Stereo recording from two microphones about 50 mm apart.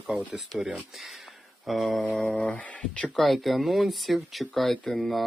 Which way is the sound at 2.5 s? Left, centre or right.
Left.